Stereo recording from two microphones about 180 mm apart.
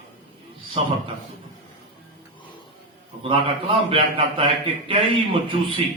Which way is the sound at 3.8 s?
30° right (ahead or behind).